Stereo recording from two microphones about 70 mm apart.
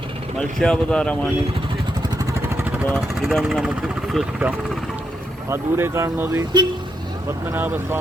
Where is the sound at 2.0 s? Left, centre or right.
Right.